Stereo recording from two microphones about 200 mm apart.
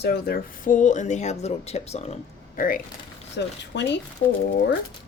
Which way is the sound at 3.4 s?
60° left (ahead or behind).